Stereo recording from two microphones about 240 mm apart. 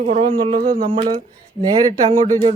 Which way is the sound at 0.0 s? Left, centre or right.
Right.